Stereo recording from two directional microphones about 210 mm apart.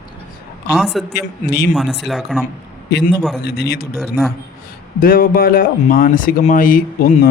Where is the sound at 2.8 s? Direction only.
55° left (ahead or behind).